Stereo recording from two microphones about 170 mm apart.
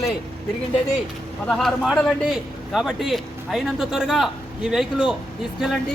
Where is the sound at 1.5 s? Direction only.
Centre (ahead or behind).